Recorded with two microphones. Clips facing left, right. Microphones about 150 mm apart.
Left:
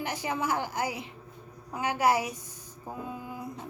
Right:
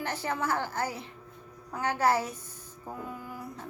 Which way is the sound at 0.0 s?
15° left (ahead or behind).